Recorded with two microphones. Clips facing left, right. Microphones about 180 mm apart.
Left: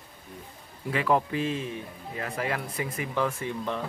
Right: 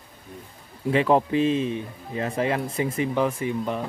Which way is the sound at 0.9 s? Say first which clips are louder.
Right 6 dB; 25° right (ahead or behind).